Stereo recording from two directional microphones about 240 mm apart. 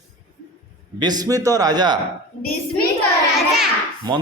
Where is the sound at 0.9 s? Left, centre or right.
Centre.